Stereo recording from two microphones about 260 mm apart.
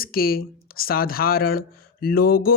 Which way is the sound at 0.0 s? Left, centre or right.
Left.